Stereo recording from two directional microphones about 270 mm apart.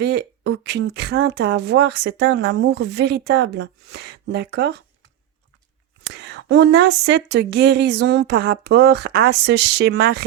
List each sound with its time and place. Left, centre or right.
0.0 s a woman's voice: right
6.1 s a woman's voice: right